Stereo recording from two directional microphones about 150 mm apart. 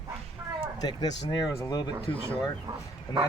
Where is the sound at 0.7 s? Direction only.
25° left (ahead or behind).